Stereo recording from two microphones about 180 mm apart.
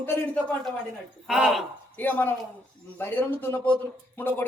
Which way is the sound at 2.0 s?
10° left (ahead or behind).